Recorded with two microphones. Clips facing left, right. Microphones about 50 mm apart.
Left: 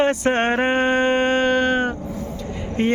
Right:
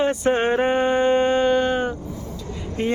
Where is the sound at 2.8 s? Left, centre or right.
Left.